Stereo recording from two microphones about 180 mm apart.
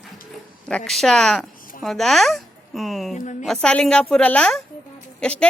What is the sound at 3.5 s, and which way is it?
A child's voice, 5° left (ahead or behind).